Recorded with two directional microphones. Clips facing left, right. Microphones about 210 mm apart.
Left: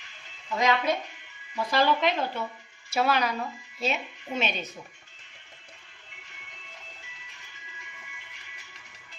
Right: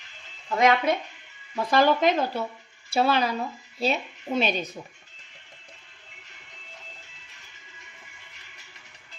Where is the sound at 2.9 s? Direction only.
30° right (ahead or behind).